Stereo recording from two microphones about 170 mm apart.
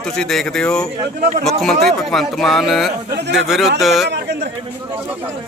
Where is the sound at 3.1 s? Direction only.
75° right (ahead or behind).